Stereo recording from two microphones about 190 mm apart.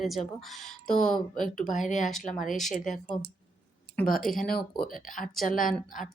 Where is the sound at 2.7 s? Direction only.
45° left (ahead or behind).